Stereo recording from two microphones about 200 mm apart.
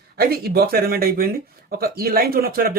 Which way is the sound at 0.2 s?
50° right (ahead or behind).